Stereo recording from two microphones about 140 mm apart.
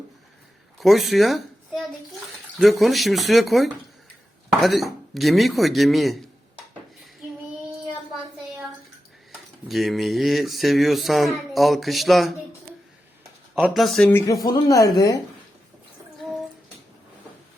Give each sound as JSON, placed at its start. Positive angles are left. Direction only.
{"t": 0.8, "sound": "speech", "side_deg": 0}
{"t": 9.6, "sound": "speech", "side_deg": 0}
{"t": 13.7, "sound": "speech", "side_deg": 0}
{"t": 14.1, "sound": "speech", "side_deg": 20}